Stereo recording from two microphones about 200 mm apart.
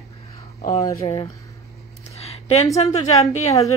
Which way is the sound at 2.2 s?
30° left (ahead or behind).